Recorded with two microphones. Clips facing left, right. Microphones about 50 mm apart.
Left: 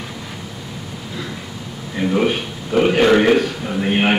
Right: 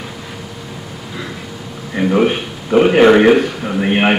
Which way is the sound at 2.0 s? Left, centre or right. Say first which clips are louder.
Right 4 dB; centre.